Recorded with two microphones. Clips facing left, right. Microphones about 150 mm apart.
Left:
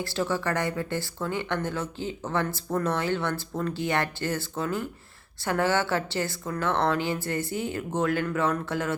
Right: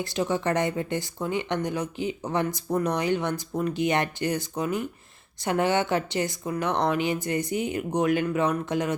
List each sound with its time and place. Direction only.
0.0 s speech: 20° right (ahead or behind)